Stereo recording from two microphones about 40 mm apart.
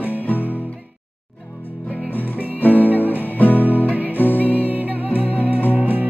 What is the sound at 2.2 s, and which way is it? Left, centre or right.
Music, right.